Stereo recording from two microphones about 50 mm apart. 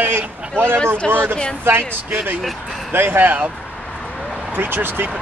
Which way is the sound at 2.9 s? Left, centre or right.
Right.